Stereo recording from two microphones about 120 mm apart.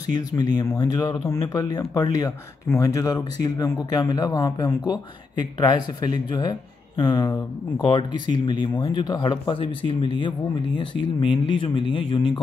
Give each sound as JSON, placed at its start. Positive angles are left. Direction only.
{"t": 0.4, "sound": "speech", "side_deg": 35}